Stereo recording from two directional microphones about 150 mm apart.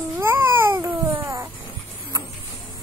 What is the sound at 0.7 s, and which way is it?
Cat, 20° right (ahead or behind).